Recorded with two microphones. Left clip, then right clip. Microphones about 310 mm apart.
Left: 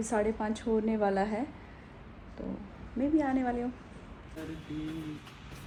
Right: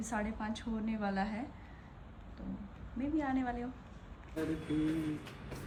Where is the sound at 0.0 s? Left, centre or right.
Centre.